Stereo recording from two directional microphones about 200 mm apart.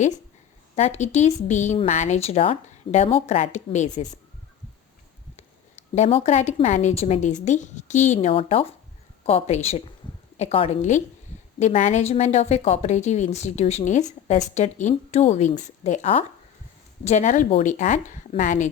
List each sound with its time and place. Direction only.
0.8 s speech: 35° left (ahead or behind)
5.4 s speech: 35° left (ahead or behind)